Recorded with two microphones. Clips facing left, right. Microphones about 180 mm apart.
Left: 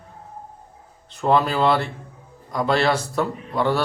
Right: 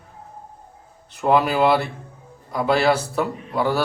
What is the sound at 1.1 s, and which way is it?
Speech, 10° right (ahead or behind).